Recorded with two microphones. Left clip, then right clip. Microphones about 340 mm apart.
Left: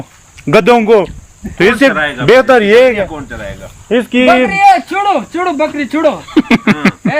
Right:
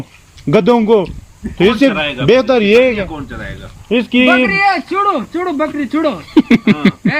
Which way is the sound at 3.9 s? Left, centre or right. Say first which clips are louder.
Left 2 dB; left.